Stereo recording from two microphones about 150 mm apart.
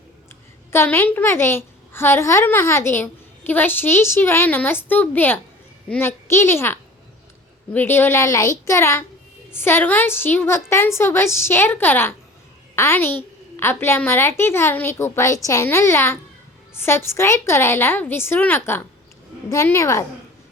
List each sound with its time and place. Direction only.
0.7 s a woman's voice: 15° left (ahead or behind)